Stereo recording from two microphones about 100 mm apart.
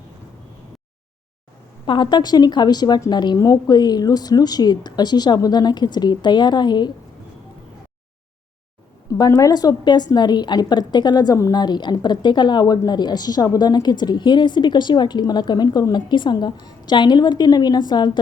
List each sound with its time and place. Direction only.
1.9 s a woman's voice: 50° left (ahead or behind)
3.3 s a woman's voice: 35° left (ahead or behind)
9.1 s a woman's voice: 35° left (ahead or behind)